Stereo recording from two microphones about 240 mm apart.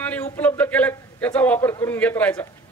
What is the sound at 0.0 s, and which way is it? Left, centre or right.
A man's voice, centre.